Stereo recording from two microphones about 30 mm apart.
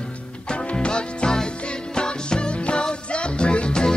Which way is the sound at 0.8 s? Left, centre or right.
Left.